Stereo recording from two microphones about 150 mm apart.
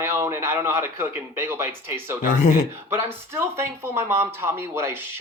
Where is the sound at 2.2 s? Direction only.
60° left (ahead or behind).